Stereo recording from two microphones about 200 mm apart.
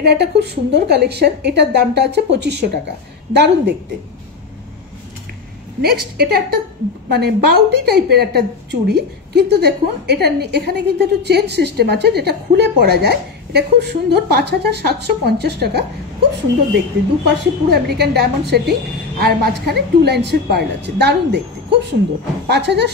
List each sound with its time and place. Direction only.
0.0 s a woman's voice: 55° right (ahead or behind)
5.8 s a woman's voice: 50° right (ahead or behind)
17.3 s a woman's voice: 55° right (ahead or behind)